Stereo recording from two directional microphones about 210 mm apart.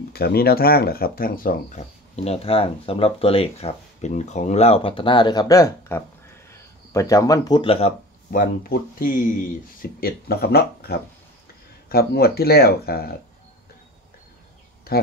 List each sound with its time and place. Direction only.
0.1 s speech: 45° left (ahead or behind); by 7.9 s 25° left (ahead or behind)
8.3 s speech: 40° left (ahead or behind)
14.9 s speech: 45° left (ahead or behind)